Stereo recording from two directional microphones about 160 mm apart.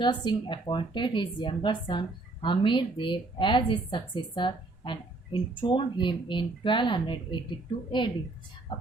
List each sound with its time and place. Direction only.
0.0 s a woman's voice: 30° left (ahead or behind)